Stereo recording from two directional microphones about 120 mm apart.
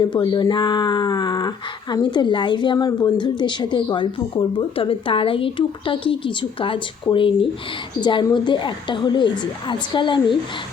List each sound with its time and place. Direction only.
0.0 s speech: 40° left (ahead or behind)